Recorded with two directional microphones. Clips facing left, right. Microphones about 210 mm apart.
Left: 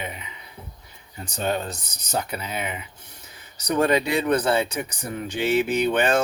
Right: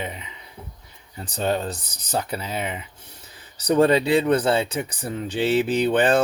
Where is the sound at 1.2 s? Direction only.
30° right (ahead or behind).